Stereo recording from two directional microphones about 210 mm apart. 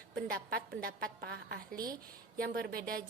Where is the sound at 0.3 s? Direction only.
45° right (ahead or behind).